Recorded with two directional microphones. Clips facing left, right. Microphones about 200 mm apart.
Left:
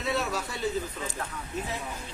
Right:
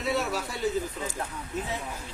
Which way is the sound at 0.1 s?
Centre (ahead or behind).